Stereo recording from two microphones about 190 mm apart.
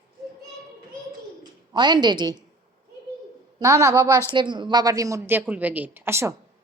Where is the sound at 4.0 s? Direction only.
10° left (ahead or behind).